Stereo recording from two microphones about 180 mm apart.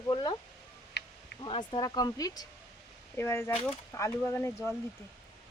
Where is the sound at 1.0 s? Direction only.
70° left (ahead or behind).